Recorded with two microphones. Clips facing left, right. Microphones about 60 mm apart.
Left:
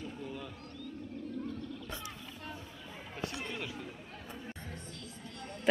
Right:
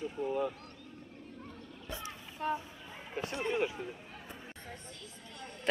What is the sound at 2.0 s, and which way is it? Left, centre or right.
Boat, right.